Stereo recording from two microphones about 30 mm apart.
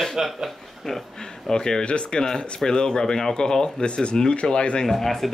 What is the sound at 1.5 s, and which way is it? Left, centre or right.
Speech, left.